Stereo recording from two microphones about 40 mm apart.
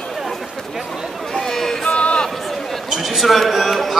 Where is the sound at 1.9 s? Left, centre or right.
Left.